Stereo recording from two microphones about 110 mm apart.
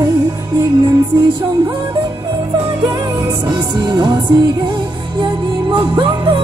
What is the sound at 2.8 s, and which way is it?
Music, 40° right (ahead or behind).